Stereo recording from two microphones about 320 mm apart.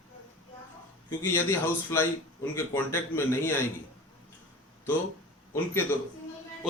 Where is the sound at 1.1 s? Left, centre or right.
Centre.